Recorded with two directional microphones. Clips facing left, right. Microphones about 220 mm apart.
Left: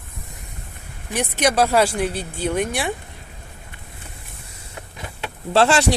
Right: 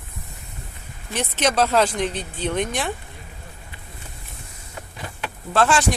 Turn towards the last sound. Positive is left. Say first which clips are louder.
# left 3 dB
turn(degrees=30)  # may be behind; listen again after turning